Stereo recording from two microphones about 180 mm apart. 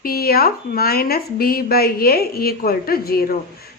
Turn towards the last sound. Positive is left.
turn(degrees=55)  # may be behind; listen again after turning